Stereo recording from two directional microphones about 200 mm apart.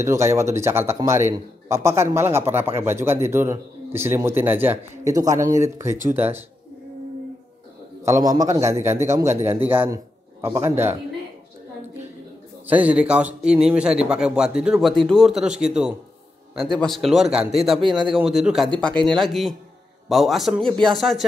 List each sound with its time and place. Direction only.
0.0 s a man's voice: 15° right (ahead or behind)
8.0 s a man's voice: 15° right (ahead or behind)
10.4 s a man's voice: 10° right (ahead or behind)
12.6 s a man's voice: 5° right (ahead or behind)
17.8 s speech: 25° right (ahead or behind)
18.1 s a man's voice: centre (ahead or behind)